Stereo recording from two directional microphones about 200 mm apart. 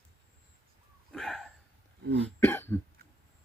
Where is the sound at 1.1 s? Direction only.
Centre (ahead or behind).